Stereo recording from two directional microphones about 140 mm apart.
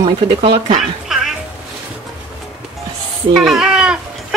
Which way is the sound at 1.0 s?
5° right (ahead or behind).